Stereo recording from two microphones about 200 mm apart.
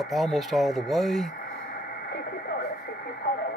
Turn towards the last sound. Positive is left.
turn(degrees=50)  # may be behind; listen again after turning